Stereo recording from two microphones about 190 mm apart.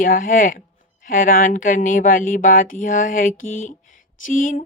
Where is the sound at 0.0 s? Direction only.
45° left (ahead or behind).